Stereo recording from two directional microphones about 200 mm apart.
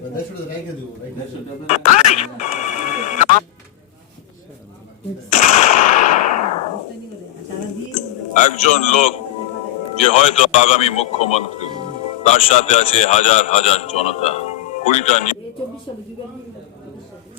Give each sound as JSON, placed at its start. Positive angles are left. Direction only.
{"t": 1.6, "sound": "music", "side_deg": 35}
{"t": 5.3, "sound": "machine gun", "side_deg": 35}
{"t": 7.9, "sound": "a man's voice", "side_deg": 40}